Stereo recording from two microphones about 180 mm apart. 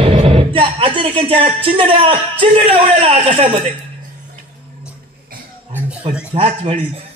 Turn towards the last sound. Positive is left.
turn(degrees=-30)  # may be behind; listen again after turning